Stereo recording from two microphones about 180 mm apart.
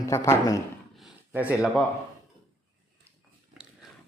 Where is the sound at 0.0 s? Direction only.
15° left (ahead or behind).